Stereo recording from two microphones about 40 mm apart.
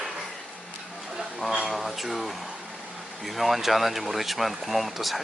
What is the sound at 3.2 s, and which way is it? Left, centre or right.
Speech, centre.